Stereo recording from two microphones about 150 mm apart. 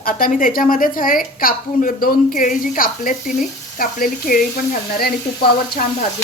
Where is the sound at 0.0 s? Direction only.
65° left (ahead or behind).